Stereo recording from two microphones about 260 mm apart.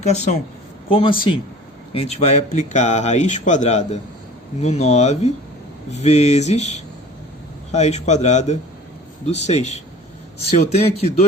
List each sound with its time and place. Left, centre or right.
0.0 s a man's voice: left